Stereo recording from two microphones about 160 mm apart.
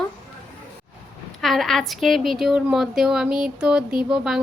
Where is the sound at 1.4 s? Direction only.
Centre (ahead or behind).